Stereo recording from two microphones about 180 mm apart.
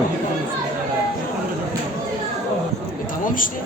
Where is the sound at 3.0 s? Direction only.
50° left (ahead or behind).